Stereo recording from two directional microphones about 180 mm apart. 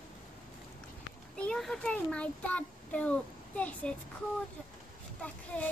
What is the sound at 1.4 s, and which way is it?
A child's voice, 5° left (ahead or behind).